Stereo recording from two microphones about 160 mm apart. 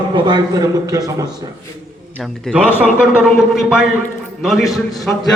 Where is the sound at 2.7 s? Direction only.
5° right (ahead or behind).